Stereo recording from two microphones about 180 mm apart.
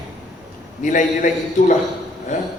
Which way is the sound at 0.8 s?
45° left (ahead or behind).